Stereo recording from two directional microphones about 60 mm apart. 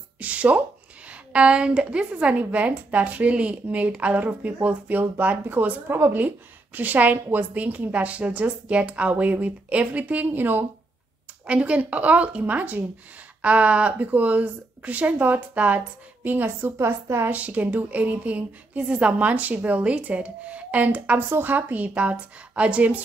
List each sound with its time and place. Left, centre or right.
0.2 s a sound: right
1.3 s a woman's voice: centre
5.9 s a woman's voice: right
11.4 s a woman's voice: centre
16.3 s a woman's voice: right
17.3 s a woman's voice: right
21.3 s a woman's voice: right